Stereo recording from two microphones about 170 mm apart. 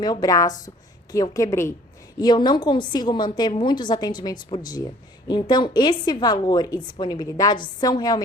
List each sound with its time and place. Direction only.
0.0 s a woman's voice: 25° left (ahead or behind)